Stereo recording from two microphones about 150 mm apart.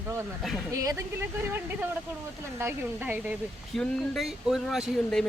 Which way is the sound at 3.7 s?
5° left (ahead or behind).